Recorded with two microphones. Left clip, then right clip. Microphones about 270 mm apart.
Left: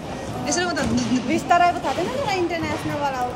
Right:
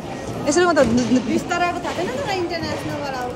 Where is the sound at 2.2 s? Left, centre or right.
Left.